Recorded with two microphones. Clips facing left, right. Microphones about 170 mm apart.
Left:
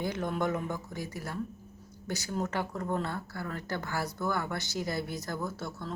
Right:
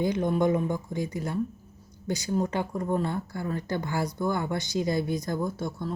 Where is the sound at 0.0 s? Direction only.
15° right (ahead or behind).